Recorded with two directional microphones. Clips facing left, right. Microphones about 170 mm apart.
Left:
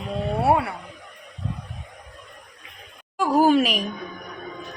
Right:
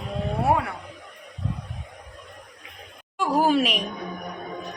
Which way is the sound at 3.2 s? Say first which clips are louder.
Left 3 dB; centre (ahead or behind).